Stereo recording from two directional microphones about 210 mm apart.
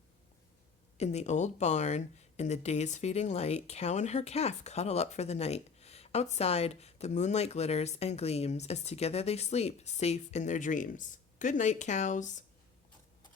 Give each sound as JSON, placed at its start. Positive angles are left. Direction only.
{"t": 0.9, "sound": "speech", "side_deg": 30}